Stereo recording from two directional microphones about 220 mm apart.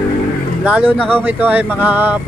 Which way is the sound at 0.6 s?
5° right (ahead or behind).